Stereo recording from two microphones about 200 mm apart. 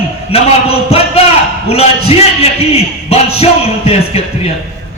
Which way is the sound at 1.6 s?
30° left (ahead or behind).